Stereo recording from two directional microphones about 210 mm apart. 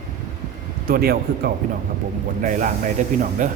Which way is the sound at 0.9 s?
45° right (ahead or behind).